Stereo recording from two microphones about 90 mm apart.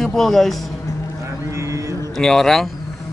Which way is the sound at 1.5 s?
35° right (ahead or behind).